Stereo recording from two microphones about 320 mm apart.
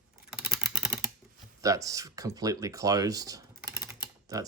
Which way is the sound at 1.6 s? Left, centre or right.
Centre.